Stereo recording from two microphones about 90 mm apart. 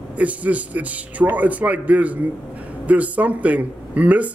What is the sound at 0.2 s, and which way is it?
A man's voice, 15° right (ahead or behind).